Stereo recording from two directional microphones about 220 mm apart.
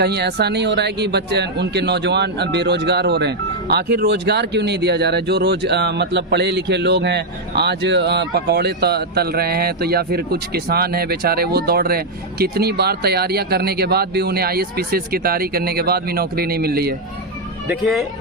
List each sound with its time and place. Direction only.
0.0 s a man's voice: 50° right (ahead or behind)
17.7 s speech: centre (ahead or behind)